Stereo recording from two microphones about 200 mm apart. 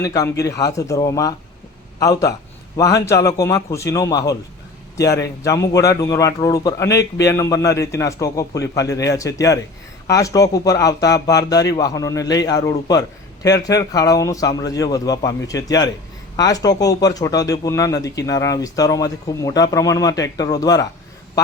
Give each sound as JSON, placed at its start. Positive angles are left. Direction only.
{"t": 0.0, "sound": "speech", "side_deg": 15}